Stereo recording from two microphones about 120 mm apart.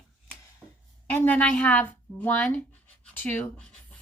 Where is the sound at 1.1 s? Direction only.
10° left (ahead or behind).